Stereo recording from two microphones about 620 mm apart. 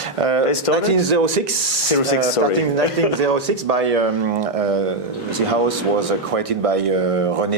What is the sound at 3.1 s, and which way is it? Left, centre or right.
Speech, right.